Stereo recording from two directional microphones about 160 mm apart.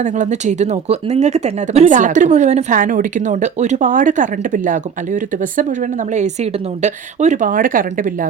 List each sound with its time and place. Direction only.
0.0 s speech: 50° right (ahead or behind)